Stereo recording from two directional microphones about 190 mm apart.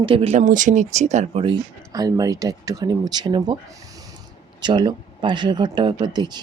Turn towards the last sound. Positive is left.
turn(degrees=-20)  # may be behind; listen again after turning